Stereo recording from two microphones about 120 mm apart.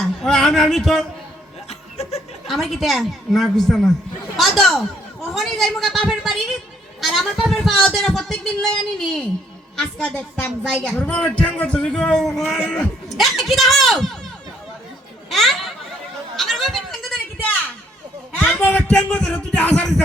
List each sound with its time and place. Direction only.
0.0 s a sound: centre (ahead or behind)
2.0 s chuckle: 65° left (ahead or behind)
2.5 s speech: centre (ahead or behind)
15.3 s a child's voice: centre (ahead or behind)
16.3 s a sound: centre (ahead or behind)
18.5 s speech: 10° left (ahead or behind)